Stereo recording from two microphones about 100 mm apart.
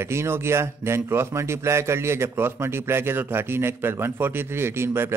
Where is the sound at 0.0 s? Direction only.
25° right (ahead or behind).